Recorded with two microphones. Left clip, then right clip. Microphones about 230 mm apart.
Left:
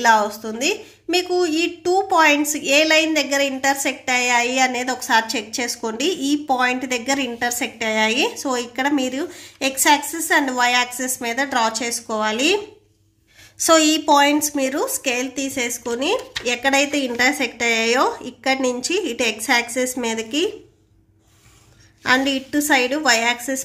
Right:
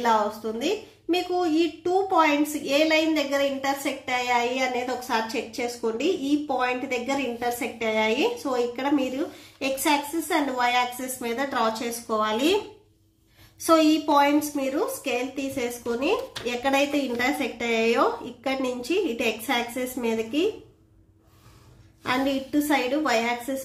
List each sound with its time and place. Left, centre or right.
0.0 s a woman's voice: left
13.7 s a woman's voice: left
22.0 s a woman's voice: left